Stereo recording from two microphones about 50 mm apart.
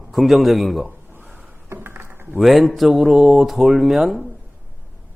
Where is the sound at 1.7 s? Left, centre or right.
Right.